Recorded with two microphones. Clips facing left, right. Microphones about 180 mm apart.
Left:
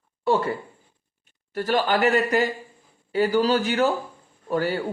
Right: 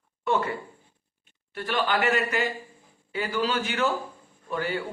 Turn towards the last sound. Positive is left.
turn(degrees=40)  # may be behind; listen again after turning